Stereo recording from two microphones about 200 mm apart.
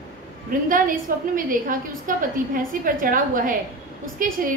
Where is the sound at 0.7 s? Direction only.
40° right (ahead or behind).